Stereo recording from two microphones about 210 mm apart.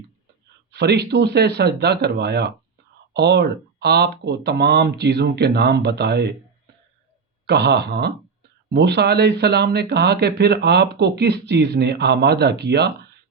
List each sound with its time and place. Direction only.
0.7 s speech: 50° right (ahead or behind)
7.4 s speech: 50° right (ahead or behind)